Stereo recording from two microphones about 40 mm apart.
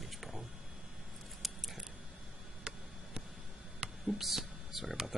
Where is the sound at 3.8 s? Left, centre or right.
Right.